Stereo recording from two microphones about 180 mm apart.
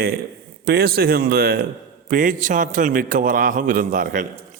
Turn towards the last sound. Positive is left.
turn(degrees=-50)  # may be behind; listen again after turning